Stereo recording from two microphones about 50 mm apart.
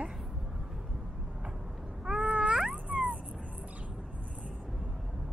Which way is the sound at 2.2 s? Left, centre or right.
Right.